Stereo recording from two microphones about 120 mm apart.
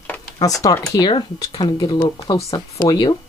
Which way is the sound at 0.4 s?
30° left (ahead or behind).